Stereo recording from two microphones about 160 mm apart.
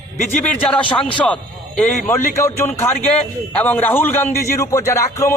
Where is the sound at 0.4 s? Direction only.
10° left (ahead or behind).